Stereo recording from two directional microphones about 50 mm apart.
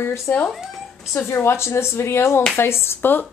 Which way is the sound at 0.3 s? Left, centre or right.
Left.